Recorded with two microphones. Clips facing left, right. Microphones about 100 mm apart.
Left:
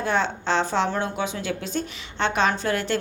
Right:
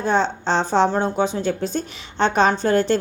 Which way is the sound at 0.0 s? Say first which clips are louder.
Right 4 dB; 30° right (ahead or behind).